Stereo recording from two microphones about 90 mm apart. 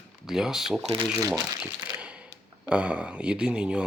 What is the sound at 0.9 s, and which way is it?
Speech, 40° right (ahead or behind).